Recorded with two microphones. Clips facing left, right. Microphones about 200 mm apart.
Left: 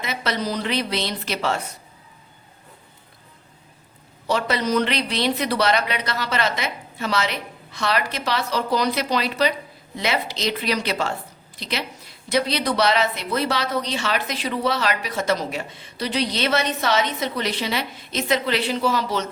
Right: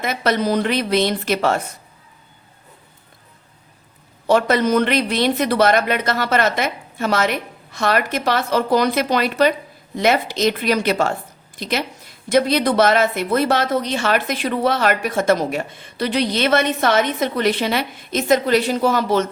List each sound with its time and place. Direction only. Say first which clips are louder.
0.0 s a woman's voice: right 6 dB; 50° right (ahead or behind)
4.3 s a woman's voice: right 6 dB; 50° right (ahead or behind)